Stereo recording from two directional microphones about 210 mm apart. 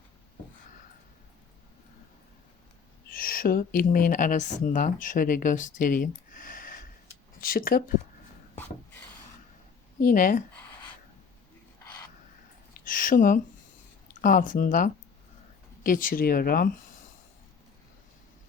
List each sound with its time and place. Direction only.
3.1 s speech: 45° left (ahead or behind)
8.5 s a sound: 10° left (ahead or behind)
10.0 s speech: 40° left (ahead or behind)
12.8 s speech: 40° left (ahead or behind)